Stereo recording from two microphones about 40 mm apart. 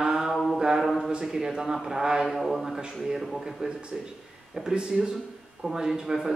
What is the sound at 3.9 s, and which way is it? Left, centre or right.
A man's voice, centre.